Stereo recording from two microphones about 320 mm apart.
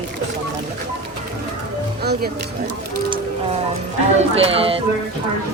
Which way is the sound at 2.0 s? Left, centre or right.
Right.